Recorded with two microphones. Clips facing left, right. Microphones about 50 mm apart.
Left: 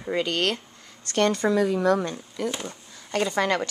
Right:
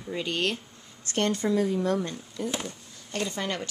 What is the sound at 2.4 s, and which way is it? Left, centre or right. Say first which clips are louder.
Speech: left 4 dB; left.